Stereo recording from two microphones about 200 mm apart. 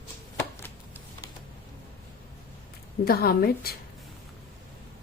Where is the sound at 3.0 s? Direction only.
50° left (ahead or behind).